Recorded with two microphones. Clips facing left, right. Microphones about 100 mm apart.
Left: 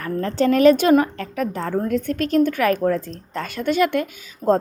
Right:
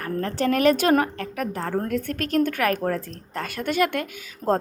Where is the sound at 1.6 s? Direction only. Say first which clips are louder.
Left 2 dB; 50° right (ahead or behind).